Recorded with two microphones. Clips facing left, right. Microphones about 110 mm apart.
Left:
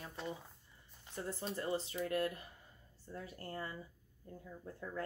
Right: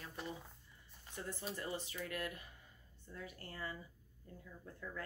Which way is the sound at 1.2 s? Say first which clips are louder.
Left 4 dB; 30° left (ahead or behind).